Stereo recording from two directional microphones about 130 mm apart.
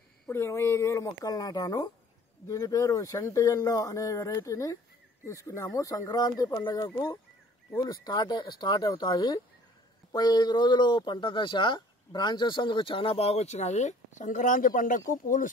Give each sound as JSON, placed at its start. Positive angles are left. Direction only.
{"t": 0.3, "sound": "speech", "side_deg": 20}